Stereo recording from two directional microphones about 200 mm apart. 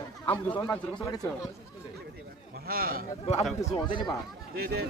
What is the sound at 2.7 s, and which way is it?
Speech, 45° right (ahead or behind).